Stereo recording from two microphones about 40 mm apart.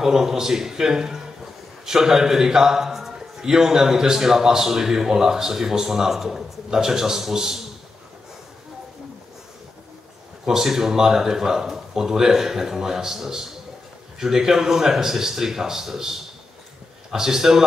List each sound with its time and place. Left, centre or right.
0.0 s a man's voice: centre
10.4 s a man's voice: centre